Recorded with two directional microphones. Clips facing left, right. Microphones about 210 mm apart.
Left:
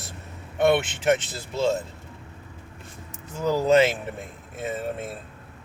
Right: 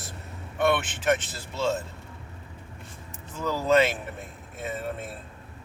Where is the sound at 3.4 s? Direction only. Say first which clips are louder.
Left 3 dB; 20° left (ahead or behind).